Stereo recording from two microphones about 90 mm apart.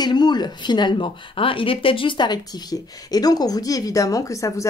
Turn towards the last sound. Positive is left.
turn(degrees=35)  # may be behind; listen again after turning